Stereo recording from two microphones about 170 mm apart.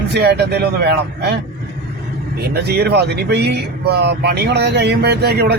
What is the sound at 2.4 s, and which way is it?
Speech, 70° right (ahead or behind).